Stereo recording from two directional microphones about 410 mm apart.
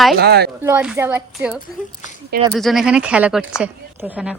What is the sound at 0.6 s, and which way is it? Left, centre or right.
Speech, centre.